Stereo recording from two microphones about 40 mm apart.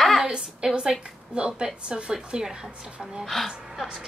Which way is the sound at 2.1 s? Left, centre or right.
Centre.